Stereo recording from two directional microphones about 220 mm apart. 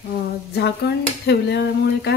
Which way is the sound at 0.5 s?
50° left (ahead or behind).